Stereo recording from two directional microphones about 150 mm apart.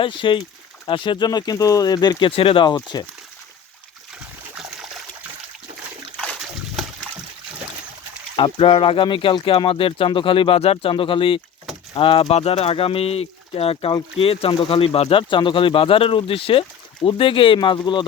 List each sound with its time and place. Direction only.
0.0 s speech: 35° left (ahead or behind)
4.5 s a sound: 5° right (ahead or behind)
6.1 s splash: centre (ahead or behind)
8.4 s speech: 35° left (ahead or behind)